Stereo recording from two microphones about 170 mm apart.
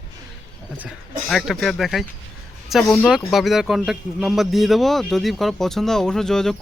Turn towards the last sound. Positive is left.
turn(degrees=5)  # may be behind; listen again after turning